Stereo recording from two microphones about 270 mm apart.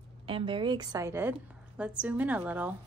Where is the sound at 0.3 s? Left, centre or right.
Centre.